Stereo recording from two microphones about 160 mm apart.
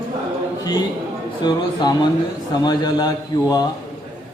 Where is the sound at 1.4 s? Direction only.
25° left (ahead or behind).